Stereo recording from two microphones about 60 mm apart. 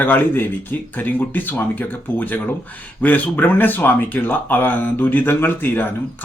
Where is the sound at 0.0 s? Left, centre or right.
Left.